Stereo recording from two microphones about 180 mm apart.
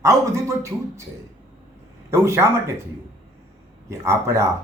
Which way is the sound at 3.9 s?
15° right (ahead or behind).